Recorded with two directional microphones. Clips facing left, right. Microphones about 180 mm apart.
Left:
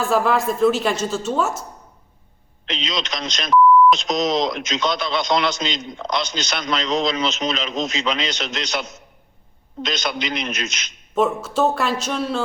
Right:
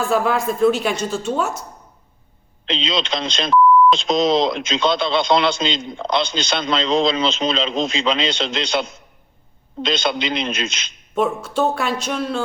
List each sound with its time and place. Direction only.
0.0 s a woman's voice: centre (ahead or behind)
2.6 s speech: 30° right (ahead or behind)
11.1 s a woman's voice: 5° left (ahead or behind)